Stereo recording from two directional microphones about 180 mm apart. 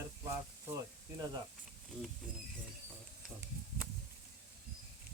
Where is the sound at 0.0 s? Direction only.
15° right (ahead or behind).